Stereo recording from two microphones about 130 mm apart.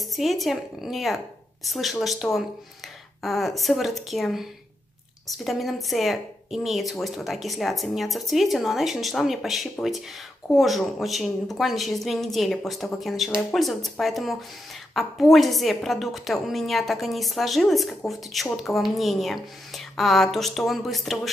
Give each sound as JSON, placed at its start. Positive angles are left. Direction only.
{"t": 0.0, "sound": "speech", "side_deg": 0}